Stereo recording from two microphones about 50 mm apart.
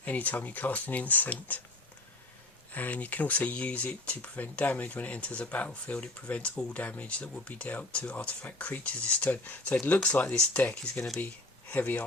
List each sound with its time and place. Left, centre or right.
0.0 s speech: left
2.7 s speech: left
10.2 s speech: centre
10.6 s speech: left